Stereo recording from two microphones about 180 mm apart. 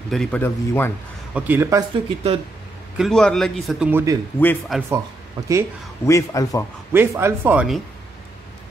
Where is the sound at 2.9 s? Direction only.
Centre (ahead or behind).